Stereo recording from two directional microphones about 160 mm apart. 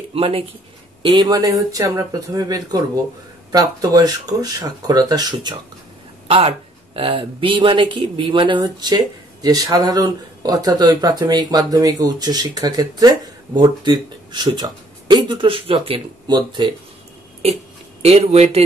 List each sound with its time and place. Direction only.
0.1 s speech: 35° right (ahead or behind)
6.2 s speech: 35° right (ahead or behind)
18.0 s speech: 40° right (ahead or behind)